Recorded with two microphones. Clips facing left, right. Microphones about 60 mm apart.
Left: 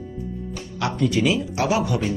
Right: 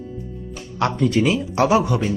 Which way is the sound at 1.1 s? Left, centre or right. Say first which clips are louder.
Right 2 dB; right.